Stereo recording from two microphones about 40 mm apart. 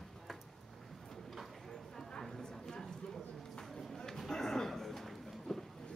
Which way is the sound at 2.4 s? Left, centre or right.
Centre.